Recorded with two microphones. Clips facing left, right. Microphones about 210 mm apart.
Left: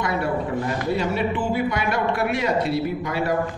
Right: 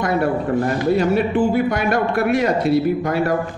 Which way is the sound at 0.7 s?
45° right (ahead or behind).